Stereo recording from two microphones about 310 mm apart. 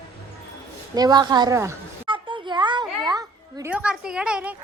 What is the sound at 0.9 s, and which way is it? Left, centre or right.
A child's voice, centre.